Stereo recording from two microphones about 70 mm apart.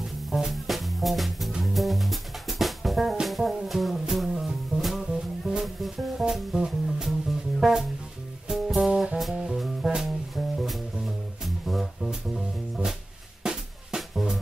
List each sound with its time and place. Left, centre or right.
0.3 s music: centre